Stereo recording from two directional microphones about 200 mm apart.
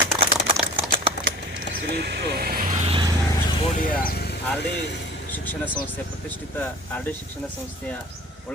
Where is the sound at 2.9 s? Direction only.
25° right (ahead or behind).